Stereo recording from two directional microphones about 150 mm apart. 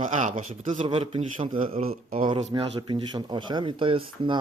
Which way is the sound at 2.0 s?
65° right (ahead or behind).